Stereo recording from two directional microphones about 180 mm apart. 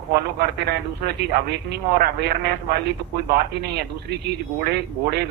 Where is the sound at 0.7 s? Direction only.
65° right (ahead or behind).